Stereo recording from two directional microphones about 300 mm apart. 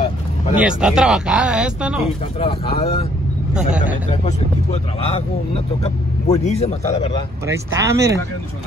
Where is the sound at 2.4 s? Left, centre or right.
Centre.